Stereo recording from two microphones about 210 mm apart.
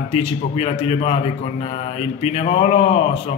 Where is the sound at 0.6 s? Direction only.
25° left (ahead or behind).